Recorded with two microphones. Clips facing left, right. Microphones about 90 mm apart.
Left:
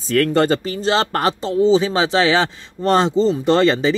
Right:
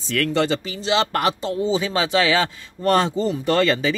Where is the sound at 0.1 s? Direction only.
45° left (ahead or behind).